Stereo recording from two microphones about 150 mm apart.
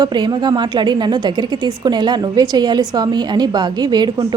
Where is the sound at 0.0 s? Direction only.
30° right (ahead or behind).